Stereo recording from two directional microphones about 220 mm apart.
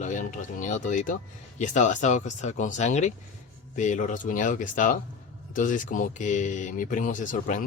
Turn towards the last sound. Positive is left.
turn(degrees=35)  # may be behind; listen again after turning